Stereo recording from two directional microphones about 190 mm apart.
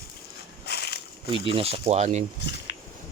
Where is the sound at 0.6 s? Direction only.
60° left (ahead or behind).